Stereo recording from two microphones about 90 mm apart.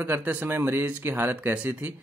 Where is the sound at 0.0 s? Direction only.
20° right (ahead or behind).